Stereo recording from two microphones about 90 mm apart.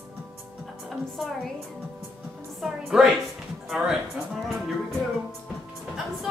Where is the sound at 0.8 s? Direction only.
Centre (ahead or behind).